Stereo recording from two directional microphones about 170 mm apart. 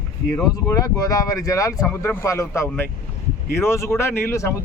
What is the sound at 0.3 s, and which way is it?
Speech, 20° left (ahead or behind).